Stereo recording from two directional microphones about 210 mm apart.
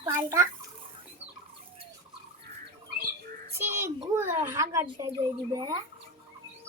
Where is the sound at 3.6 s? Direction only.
10° right (ahead or behind).